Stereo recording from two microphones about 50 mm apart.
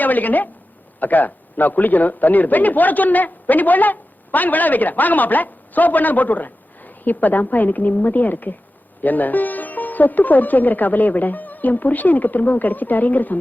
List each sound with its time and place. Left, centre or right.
0.0 s a man's voice: left